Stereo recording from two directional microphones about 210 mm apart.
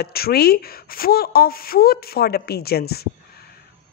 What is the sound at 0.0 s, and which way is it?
A woman's voice, 45° left (ahead or behind).